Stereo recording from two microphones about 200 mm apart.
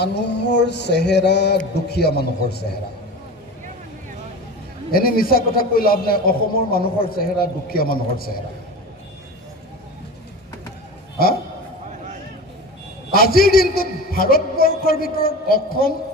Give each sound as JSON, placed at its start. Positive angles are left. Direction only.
{"t": 0.0, "sound": "mantra", "side_deg": 60}
{"t": 4.9, "sound": "a man's voice", "side_deg": 45}
{"t": 13.1, "sound": "a man's voice", "side_deg": 50}